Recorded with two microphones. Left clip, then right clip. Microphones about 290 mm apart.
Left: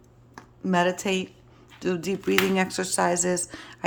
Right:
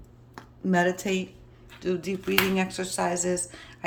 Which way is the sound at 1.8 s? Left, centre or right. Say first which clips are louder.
Left 2 dB; centre.